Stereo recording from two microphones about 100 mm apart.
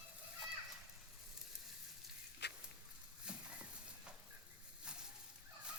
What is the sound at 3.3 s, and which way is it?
Horse, 10° right (ahead or behind).